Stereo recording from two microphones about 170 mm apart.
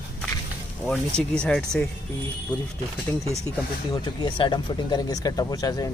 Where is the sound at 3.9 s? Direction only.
25° left (ahead or behind).